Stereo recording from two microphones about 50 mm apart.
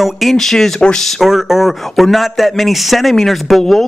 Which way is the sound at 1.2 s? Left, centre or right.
Centre.